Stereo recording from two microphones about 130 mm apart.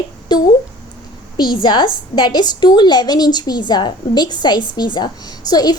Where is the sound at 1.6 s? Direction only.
35° left (ahead or behind).